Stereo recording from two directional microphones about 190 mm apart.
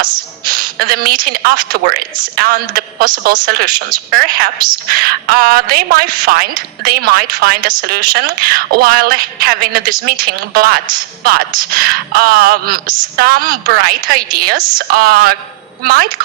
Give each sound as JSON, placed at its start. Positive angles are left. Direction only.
{"t": 0.0, "sound": "a woman's voice", "side_deg": -50}